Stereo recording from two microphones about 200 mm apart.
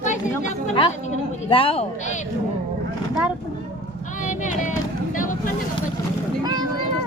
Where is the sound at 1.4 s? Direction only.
25° left (ahead or behind).